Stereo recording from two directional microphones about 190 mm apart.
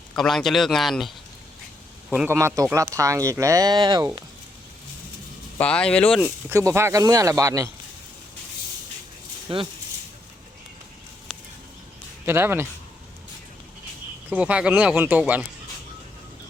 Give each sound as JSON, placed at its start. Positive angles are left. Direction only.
{"t": 0.2, "sound": "speech", "side_deg": 0}
{"t": 5.5, "sound": "speech", "side_deg": 5}
{"t": 6.2, "sound": "speech", "side_deg": -15}
{"t": 9.5, "sound": "speech", "side_deg": -25}
{"t": 11.3, "sound": "a sound", "side_deg": 5}
{"t": 12.2, "sound": "speech", "side_deg": -10}
{"t": 14.3, "sound": "speech", "side_deg": -5}